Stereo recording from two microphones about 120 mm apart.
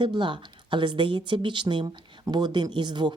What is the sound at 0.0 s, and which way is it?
Speech, 40° right (ahead or behind).